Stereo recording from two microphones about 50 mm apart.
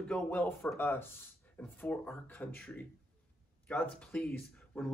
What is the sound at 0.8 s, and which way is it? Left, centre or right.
Speech, left.